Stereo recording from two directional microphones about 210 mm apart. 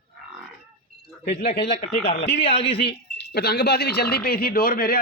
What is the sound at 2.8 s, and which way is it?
Speech, 50° left (ahead or behind).